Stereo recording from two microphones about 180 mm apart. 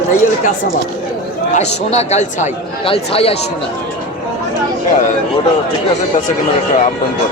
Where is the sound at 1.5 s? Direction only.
40° left (ahead or behind).